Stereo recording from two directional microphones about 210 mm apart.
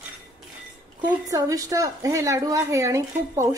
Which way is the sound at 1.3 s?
15° right (ahead or behind).